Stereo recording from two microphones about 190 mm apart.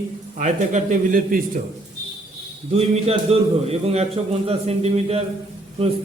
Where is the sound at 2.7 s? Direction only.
30° right (ahead or behind).